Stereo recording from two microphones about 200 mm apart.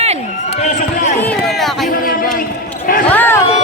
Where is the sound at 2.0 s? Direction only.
45° left (ahead or behind).